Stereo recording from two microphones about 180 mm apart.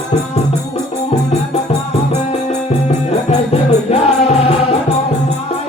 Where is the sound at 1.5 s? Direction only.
40° left (ahead or behind).